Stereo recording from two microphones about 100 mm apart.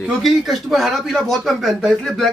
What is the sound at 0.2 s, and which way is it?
Speech, centre (ahead or behind).